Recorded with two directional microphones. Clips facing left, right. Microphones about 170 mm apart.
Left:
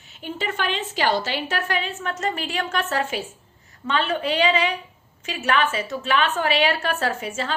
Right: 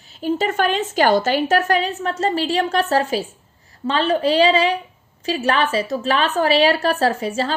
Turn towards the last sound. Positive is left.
turn(degrees=-35)  # may be behind; listen again after turning